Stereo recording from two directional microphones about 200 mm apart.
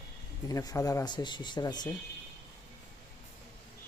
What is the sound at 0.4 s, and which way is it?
Speech, 15° left (ahead or behind).